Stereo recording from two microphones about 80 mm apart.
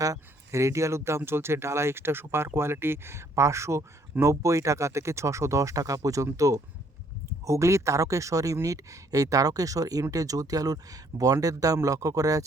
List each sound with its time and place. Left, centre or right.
0.0 s speech: right